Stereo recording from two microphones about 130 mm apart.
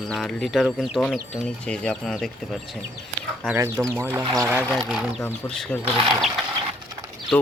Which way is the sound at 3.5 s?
20° right (ahead or behind).